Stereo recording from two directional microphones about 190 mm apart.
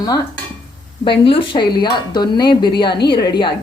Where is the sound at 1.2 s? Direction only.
25° left (ahead or behind).